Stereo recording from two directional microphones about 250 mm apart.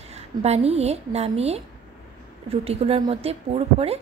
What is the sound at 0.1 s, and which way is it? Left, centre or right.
A woman's voice, right.